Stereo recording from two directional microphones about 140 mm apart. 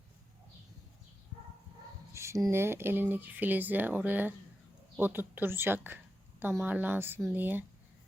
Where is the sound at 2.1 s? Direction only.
20° right (ahead or behind).